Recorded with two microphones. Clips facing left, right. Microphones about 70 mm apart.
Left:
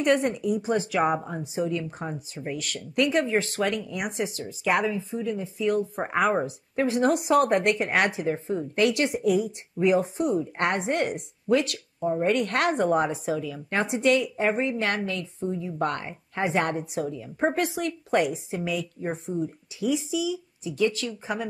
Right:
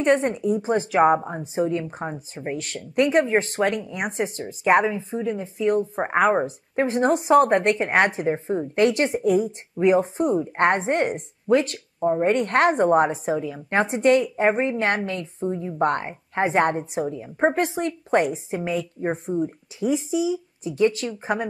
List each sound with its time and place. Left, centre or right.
0.0 s a woman's voice: right